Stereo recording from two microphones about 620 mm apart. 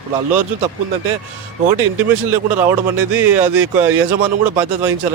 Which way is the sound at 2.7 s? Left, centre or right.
Right.